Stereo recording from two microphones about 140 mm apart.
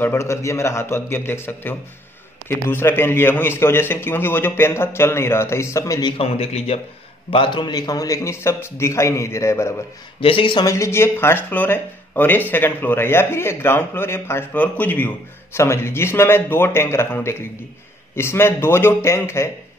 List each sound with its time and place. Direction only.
0.0 s speech: 20° left (ahead or behind)
6.1 s a man's voice: 45° left (ahead or behind); by 9.8 s 20° left (ahead or behind)
10.2 s speech: 40° left (ahead or behind)
10.6 s a man's voice: 20° left (ahead or behind)